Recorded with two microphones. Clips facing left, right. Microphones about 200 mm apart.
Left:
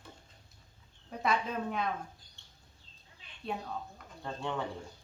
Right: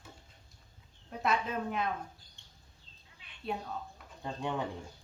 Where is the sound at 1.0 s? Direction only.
Centre (ahead or behind).